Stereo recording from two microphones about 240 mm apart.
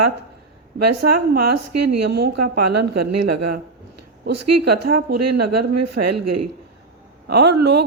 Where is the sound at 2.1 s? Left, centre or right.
Right.